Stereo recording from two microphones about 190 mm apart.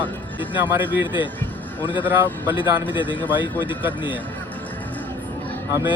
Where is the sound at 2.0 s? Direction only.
10° right (ahead or behind).